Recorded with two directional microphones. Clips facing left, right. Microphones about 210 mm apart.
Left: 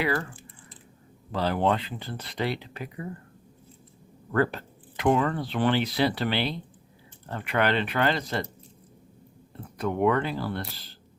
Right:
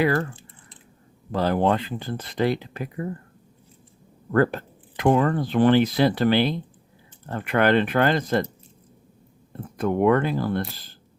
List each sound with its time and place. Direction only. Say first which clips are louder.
0.0 s speech: right 6 dB; 45° right (ahead or behind)
1.3 s speech: right 4 dB; 45° right (ahead or behind)
4.3 s speech: right 5 dB; 45° right (ahead or behind)
9.7 s speech: right 5 dB; 50° right (ahead or behind)